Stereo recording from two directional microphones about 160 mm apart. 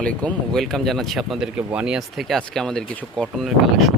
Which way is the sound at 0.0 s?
5° left (ahead or behind).